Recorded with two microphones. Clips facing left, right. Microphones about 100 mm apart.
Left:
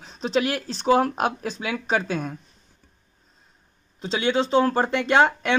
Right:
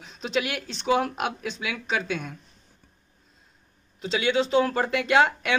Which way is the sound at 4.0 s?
30° left (ahead or behind).